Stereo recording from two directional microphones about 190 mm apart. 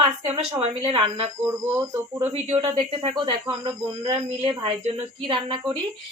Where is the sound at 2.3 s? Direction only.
30° right (ahead or behind).